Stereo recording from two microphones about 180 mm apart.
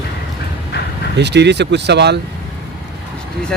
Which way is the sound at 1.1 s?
70° right (ahead or behind).